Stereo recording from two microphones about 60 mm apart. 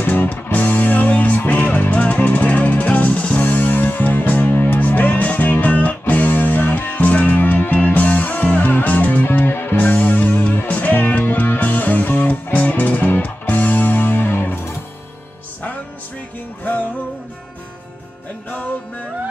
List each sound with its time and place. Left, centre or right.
0.0 s music: left